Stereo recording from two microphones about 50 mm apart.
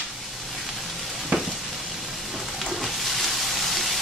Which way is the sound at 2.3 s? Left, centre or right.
Centre.